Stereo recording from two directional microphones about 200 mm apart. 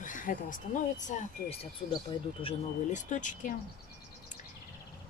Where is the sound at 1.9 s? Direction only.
25° left (ahead or behind).